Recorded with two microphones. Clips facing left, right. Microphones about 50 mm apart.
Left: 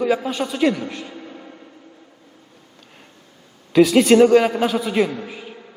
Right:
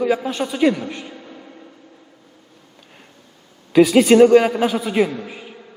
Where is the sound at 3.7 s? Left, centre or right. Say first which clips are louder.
Right 1 dB; centre.